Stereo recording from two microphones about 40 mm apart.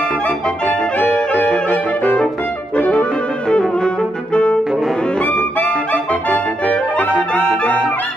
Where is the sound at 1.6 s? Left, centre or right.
Left.